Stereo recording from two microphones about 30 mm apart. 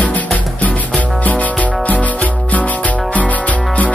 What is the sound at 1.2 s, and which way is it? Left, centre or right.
Music, left.